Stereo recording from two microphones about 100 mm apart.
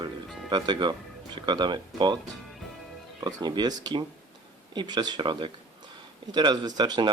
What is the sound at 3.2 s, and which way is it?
Speech, 45° right (ahead or behind).